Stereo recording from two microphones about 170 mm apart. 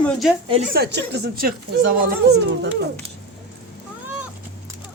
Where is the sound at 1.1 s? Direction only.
60° right (ahead or behind).